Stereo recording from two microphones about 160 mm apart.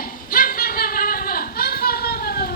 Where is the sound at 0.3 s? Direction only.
65° left (ahead or behind).